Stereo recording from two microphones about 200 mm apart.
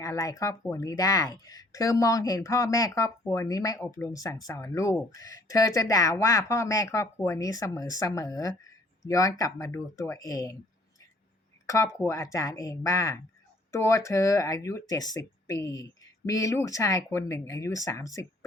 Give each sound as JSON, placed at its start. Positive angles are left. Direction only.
{"t": 0.0, "sound": "speech", "side_deg": 15}
{"t": 11.6, "sound": "a sound", "side_deg": 15}
{"t": 11.9, "sound": "speech", "side_deg": 15}